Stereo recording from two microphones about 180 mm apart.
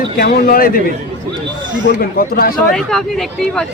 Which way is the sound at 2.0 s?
55° left (ahead or behind).